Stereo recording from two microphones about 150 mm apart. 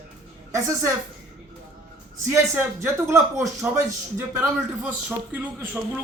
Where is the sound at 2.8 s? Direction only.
15° right (ahead or behind).